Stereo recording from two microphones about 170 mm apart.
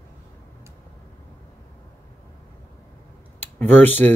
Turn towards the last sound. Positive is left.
turn(degrees=10)  # may be behind; listen again after turning